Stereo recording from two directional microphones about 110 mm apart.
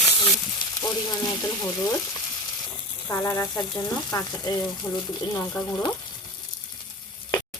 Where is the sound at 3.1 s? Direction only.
25° left (ahead or behind).